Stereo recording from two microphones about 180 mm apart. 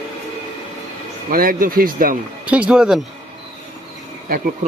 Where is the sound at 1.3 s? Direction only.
55° right (ahead or behind).